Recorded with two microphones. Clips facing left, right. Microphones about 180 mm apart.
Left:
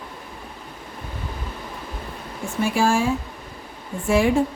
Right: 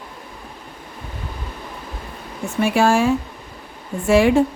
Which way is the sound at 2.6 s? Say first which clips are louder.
Right 4 dB; 65° right (ahead or behind).